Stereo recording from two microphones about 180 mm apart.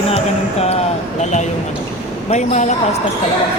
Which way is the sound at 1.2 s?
40° left (ahead or behind).